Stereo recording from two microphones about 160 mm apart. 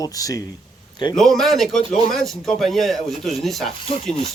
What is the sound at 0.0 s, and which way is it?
Speech, 20° left (ahead or behind).